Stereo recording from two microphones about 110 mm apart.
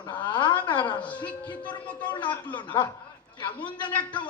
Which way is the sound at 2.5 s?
45° left (ahead or behind).